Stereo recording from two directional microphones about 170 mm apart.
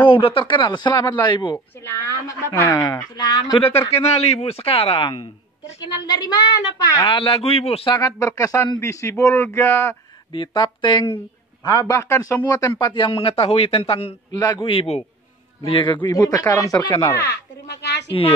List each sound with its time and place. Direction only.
0.0 s a man's voice: 30° left (ahead or behind)
1.8 s a man's voice: 15° left (ahead or behind)
3.9 s a man's voice: 35° left (ahead or behind)
8.2 s speech: 15° left (ahead or behind)
10.3 s a man's voice: 30° left (ahead or behind)
17.3 s speech: 80° left